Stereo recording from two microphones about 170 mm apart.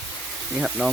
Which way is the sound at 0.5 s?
Centre (ahead or behind).